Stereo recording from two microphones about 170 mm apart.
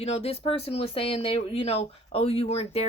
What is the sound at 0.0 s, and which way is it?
Speech, 35° left (ahead or behind).